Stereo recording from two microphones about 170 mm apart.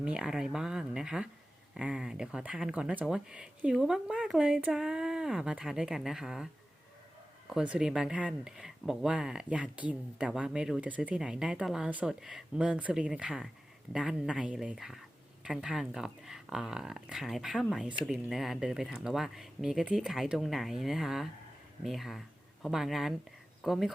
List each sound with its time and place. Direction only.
0.0 s speech: 5° right (ahead or behind)
7.5 s speech: 5° right (ahead or behind)